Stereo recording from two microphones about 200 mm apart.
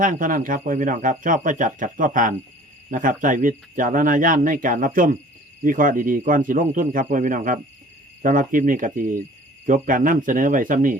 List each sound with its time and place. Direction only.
0.0 s speech: 40° right (ahead or behind)